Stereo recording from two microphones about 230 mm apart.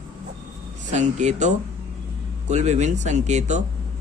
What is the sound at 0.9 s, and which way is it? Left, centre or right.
Speech, right.